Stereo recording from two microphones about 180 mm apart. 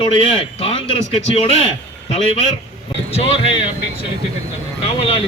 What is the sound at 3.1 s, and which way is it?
A man's voice, 30° left (ahead or behind).